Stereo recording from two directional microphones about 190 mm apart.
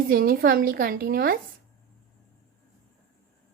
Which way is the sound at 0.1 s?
50° right (ahead or behind).